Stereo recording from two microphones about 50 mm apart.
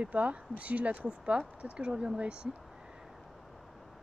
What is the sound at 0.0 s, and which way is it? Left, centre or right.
Speech, right.